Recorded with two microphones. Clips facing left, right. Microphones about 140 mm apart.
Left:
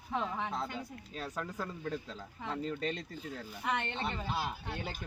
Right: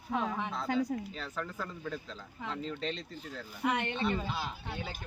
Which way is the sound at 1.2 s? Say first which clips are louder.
Even; 15° left (ahead or behind).